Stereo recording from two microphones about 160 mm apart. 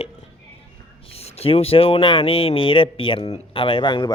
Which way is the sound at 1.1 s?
40° left (ahead or behind).